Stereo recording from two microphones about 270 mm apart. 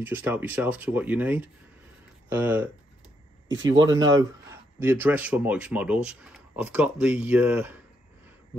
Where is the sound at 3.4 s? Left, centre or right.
Right.